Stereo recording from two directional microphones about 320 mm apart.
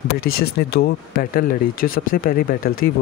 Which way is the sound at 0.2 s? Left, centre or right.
Left.